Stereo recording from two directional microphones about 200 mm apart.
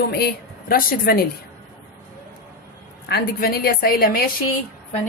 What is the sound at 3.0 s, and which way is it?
A woman's voice, 50° left (ahead or behind).